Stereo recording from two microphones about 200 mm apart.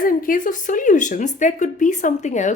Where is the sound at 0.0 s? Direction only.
45° left (ahead or behind).